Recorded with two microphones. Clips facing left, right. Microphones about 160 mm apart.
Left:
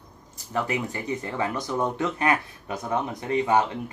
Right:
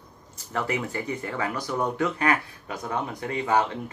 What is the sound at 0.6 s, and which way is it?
Speech, 15° left (ahead or behind).